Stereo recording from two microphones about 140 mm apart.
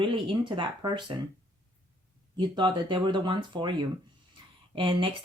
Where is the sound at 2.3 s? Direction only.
30° right (ahead or behind).